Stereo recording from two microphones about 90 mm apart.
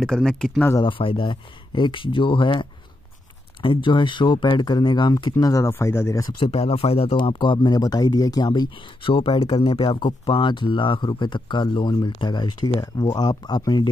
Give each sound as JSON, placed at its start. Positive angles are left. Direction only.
{"t": 0.0, "sound": "speech", "side_deg": 5}
{"t": 0.8, "sound": "speech", "side_deg": 75}
{"t": 5.4, "sound": "speech", "side_deg": 40}
{"t": 6.4, "sound": "speech", "side_deg": 90}